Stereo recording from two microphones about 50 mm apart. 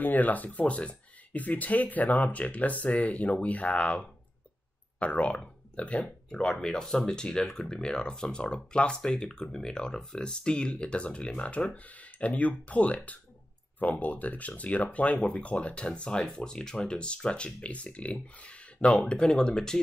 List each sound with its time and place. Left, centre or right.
0.0 s speech: left
6.3 s speech: centre